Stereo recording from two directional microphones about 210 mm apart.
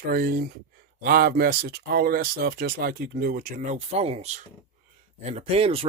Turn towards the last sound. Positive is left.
turn(degrees=-30)  # may be behind; listen again after turning